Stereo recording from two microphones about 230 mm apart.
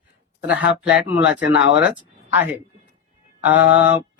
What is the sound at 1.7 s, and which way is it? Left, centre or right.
Speech, centre.